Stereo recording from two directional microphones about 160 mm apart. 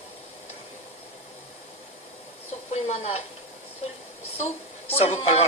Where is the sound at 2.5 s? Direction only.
40° left (ahead or behind).